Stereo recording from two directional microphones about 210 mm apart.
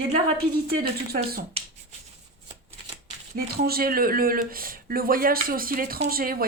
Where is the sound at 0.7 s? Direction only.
45° right (ahead or behind).